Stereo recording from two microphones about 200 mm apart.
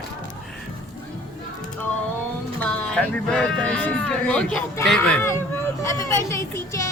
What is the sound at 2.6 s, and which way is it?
Speech, 5° left (ahead or behind).